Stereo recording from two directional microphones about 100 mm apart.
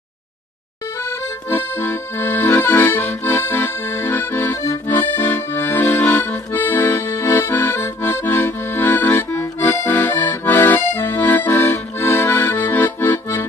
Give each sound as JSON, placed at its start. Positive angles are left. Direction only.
{"t": 1.0, "sound": "accordion", "side_deg": 25}